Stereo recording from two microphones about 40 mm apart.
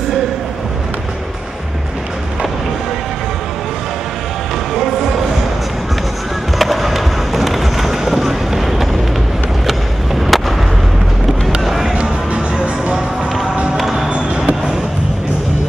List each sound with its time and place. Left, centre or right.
6.6 s music: centre
10.3 s fireworks: centre
11.6 s music: centre
11.9 s music: right
13.7 s music: centre
14.0 s music: right